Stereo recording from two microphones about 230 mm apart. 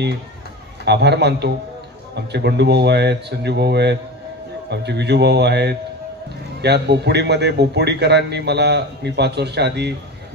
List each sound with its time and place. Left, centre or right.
0.8 s a man's voice: right